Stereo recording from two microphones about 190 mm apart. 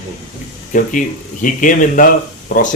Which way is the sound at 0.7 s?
45° left (ahead or behind).